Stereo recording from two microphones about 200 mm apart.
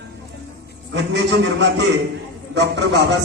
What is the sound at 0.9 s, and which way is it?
A man's voice, 60° right (ahead or behind).